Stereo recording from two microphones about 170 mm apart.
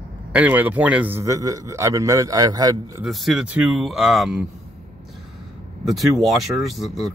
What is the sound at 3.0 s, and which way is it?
Speech, centre (ahead or behind).